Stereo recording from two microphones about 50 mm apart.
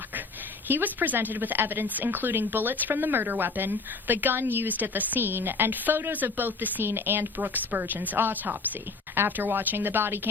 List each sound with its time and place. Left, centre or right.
0.7 s a woman's voice: right